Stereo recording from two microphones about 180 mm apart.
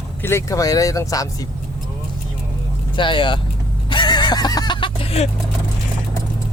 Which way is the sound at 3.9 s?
25° left (ahead or behind).